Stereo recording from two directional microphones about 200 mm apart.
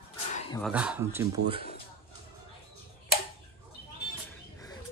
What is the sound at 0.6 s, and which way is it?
Speech, 5° right (ahead or behind).